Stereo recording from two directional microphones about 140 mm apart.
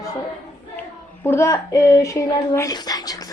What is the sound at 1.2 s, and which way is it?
Speech, 20° left (ahead or behind).